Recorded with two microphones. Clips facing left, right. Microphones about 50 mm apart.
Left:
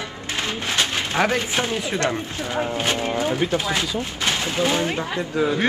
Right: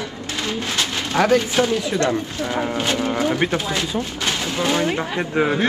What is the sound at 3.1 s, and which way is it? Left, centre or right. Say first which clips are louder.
Speech: right 2 dB; right.